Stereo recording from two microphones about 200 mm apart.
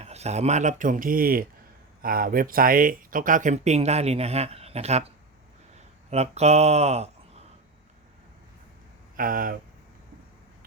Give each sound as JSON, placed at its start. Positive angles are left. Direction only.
{"t": 0.0, "sound": "speech", "side_deg": -35}
{"t": 6.1, "sound": "speech", "side_deg": -30}
{"t": 9.1, "sound": "speech", "side_deg": -45}